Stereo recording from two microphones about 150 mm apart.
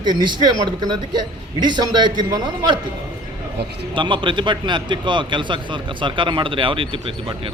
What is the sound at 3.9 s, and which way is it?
A man's voice, 35° right (ahead or behind).